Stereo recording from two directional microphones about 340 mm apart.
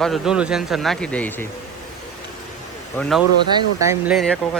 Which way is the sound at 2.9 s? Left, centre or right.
Centre.